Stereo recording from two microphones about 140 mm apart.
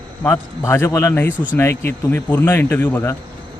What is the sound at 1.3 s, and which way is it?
Speech, 10° right (ahead or behind).